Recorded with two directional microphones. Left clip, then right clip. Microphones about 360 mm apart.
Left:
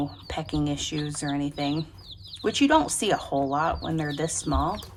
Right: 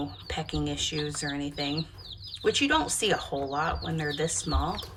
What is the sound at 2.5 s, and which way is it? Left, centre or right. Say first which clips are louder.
A woman's voice: left 3 dB; centre.